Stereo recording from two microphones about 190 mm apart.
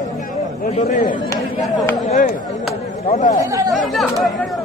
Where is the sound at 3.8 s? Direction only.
Centre (ahead or behind).